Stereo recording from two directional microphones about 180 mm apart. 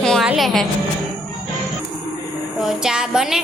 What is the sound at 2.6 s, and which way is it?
Speech, 5° right (ahead or behind).